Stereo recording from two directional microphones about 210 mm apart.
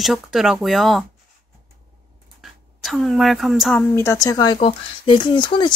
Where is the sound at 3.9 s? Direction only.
15° left (ahead or behind).